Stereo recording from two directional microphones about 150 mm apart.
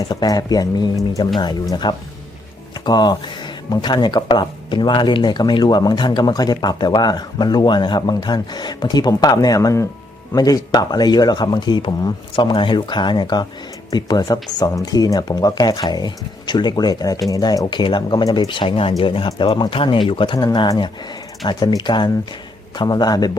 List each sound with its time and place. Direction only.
0.1 s speech: 25° left (ahead or behind)